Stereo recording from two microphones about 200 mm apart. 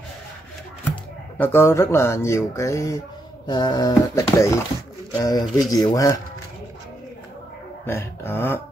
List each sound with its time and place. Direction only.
1.4 s speech: 10° left (ahead or behind)
7.8 s speech: 10° left (ahead or behind)